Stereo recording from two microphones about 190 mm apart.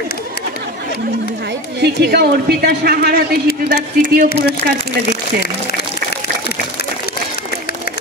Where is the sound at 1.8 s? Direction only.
55° right (ahead or behind).